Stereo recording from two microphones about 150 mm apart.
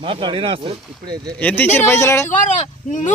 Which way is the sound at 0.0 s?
35° right (ahead or behind).